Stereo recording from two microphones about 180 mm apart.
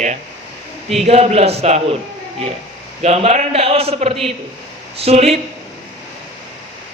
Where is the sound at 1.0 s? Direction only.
35° right (ahead or behind).